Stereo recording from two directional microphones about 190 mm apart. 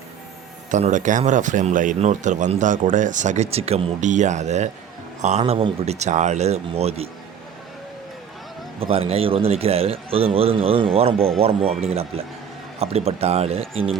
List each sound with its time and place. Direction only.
0.7 s a man's voice: 40° right (ahead or behind)
8.8 s a man's voice: 30° right (ahead or behind)